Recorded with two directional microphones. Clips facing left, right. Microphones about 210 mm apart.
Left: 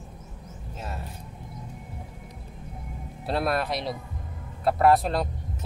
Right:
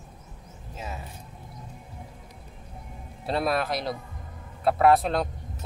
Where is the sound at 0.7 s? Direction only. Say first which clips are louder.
Even; centre (ahead or behind).